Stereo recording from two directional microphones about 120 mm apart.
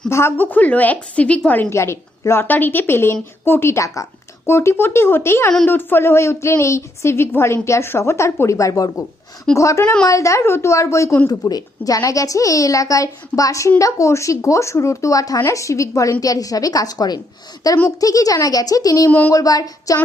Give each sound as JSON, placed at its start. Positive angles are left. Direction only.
{"t": 0.1, "sound": "a woman's voice", "side_deg": 20}
{"t": 1.7, "sound": "a woman's voice", "side_deg": 25}